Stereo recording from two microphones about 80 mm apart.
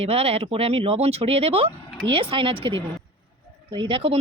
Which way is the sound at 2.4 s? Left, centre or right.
Right.